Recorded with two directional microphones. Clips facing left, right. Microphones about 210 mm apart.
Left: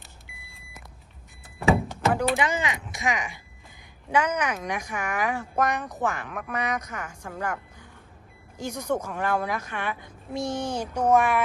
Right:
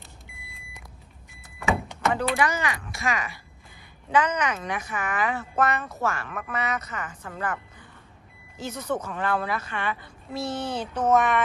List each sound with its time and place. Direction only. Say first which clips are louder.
0.5 s vehicle: even; centre (ahead or behind)
1.5 s vehicle: left 4 dB; 30° left (ahead or behind)
2.4 s speech: right 1 dB; 20° left (ahead or behind)